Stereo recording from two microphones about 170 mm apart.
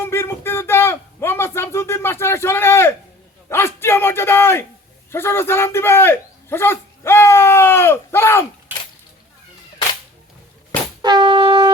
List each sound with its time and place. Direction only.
0.0 s a sound: 15° left (ahead or behind)
5.1 s speech: 15° left (ahead or behind)
11.0 s wind instrument: 25° right (ahead or behind)